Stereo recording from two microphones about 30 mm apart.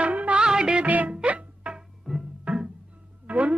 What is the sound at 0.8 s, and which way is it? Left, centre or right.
Music, right.